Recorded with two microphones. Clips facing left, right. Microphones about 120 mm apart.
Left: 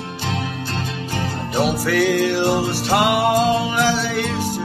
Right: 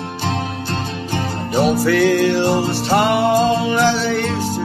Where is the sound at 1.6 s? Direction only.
5° left (ahead or behind).